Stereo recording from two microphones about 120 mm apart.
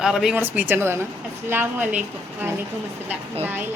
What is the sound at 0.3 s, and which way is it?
A woman's voice, 15° right (ahead or behind).